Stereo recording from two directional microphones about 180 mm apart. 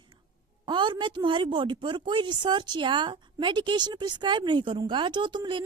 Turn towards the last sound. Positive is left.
turn(degrees=-25)  # may be behind; listen again after turning